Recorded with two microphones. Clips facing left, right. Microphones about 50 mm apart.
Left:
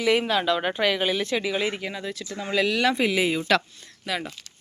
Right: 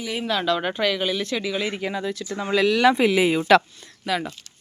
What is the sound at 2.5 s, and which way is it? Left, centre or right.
Speech, centre.